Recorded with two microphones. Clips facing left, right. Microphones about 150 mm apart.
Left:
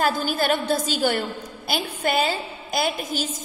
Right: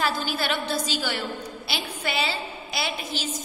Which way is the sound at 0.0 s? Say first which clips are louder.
Left 4 dB; 45° left (ahead or behind).